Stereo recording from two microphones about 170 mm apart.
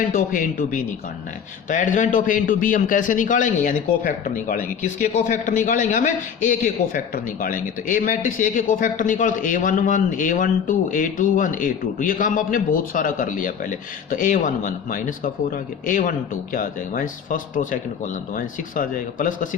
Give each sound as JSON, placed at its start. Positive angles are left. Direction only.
{"t": 0.1, "sound": "a man's voice", "side_deg": 50}